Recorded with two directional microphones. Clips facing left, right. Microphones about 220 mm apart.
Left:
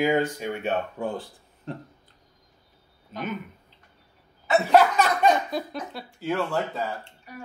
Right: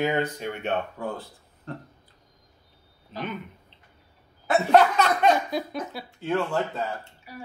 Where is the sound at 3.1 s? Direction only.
5° left (ahead or behind).